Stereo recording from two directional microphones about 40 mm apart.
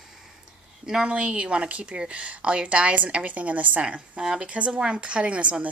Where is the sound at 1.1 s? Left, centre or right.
Right.